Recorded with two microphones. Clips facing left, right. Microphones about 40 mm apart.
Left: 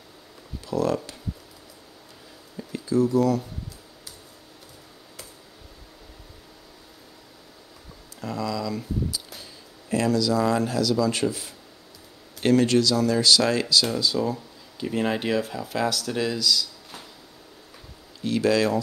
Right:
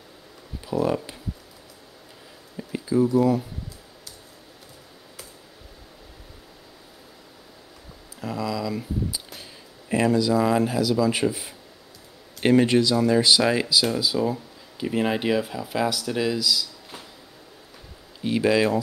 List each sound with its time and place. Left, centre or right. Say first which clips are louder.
0.7 s speech: right 1 dB; centre
2.5 s a sound: right 1 dB; centre
8.2 s speech: right 1 dB; centre
18.2 s speech: right 1 dB; centre